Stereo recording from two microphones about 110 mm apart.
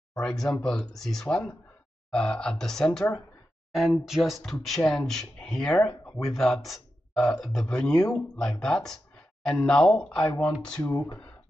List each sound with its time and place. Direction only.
0.2 s speech: 5° left (ahead or behind)
10.8 s speech: 35° left (ahead or behind)